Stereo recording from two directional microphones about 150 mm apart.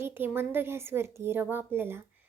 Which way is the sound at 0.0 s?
15° right (ahead or behind).